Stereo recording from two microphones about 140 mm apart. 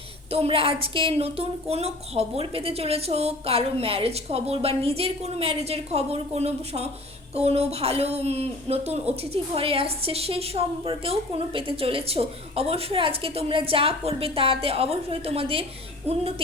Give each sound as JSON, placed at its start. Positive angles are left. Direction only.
{"t": 0.3, "sound": "speech", "side_deg": -45}